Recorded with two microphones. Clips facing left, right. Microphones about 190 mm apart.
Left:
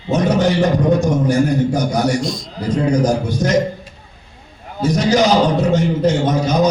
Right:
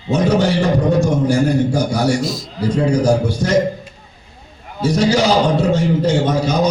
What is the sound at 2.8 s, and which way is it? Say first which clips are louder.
Speech: right 1 dB; 30° right (ahead or behind).